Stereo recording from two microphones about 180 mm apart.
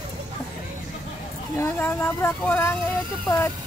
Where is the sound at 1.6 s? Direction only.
10° left (ahead or behind).